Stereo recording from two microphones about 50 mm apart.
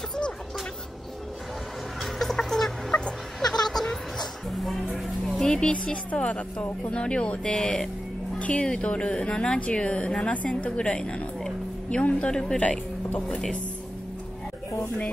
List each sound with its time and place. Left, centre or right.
2.0 s chicken: centre
2.9 s music: centre
3.3 s music: centre
4.9 s a woman's voice: centre
8.4 s a woman's voice: left